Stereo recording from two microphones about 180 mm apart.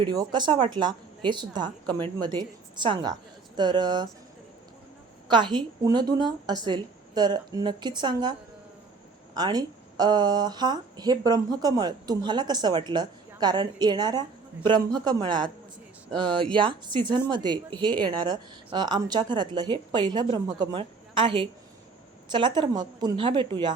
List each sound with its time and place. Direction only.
0.0 s speech: 25° right (ahead or behind)
5.3 s speech: 25° right (ahead or behind)